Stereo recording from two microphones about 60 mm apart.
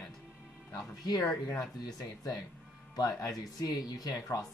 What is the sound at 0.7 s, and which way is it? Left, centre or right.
Speech, left.